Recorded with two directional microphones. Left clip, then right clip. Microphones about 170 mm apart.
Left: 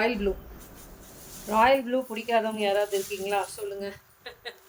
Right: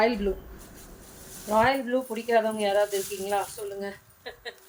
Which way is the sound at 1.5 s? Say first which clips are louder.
Left 1 dB; 20° left (ahead or behind).